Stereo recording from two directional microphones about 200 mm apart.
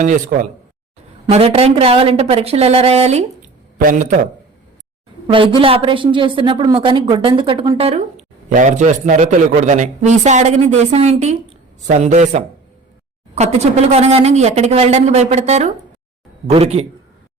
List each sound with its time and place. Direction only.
0.0 s a woman's voice: 45° right (ahead or behind)
1.3 s a woman's voice: 30° right (ahead or behind)
5.3 s a woman's voice: 25° right (ahead or behind)